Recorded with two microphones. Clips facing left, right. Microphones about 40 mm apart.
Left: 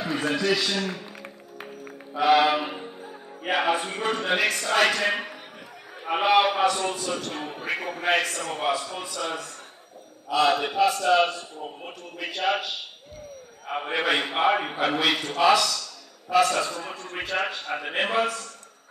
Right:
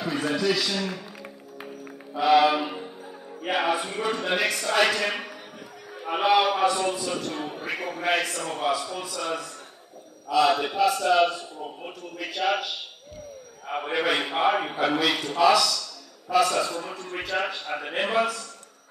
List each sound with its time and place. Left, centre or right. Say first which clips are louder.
0.0 s music: even; left
2.1 s a man's voice: even; left
13.8 s a man's voice: even; left